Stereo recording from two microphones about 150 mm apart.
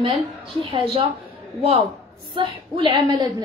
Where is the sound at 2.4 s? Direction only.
30° right (ahead or behind).